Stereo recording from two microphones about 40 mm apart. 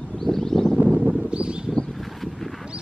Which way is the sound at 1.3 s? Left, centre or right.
Right.